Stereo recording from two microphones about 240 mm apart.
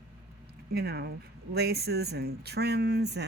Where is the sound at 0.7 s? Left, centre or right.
Right.